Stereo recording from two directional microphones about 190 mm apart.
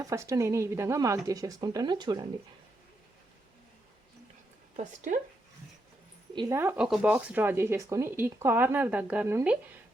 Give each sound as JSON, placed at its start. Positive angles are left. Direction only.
{"t": 0.0, "sound": "speech", "side_deg": -15}
{"t": 4.8, "sound": "speech", "side_deg": -40}
{"t": 6.3, "sound": "speech", "side_deg": -20}
{"t": 6.6, "sound": "speech", "side_deg": -10}